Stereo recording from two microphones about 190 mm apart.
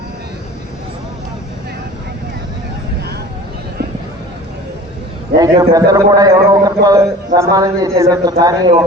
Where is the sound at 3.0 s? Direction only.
55° right (ahead or behind).